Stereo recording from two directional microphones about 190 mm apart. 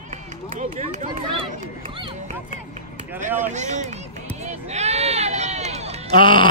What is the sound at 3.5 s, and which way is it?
Run, 40° right (ahead or behind).